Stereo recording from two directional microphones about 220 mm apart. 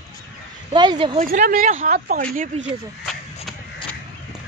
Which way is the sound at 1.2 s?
35° right (ahead or behind).